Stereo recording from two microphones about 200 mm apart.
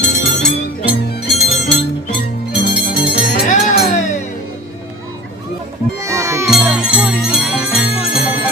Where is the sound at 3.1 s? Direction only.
40° left (ahead or behind).